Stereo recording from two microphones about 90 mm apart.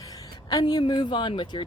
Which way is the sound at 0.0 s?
40° left (ahead or behind).